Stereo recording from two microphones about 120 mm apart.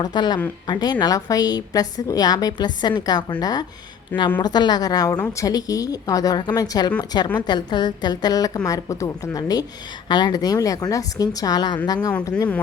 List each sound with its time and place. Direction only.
0.0 s a woman's voice: 35° left (ahead or behind)